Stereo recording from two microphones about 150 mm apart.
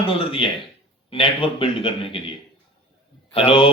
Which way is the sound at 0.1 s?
35° left (ahead or behind).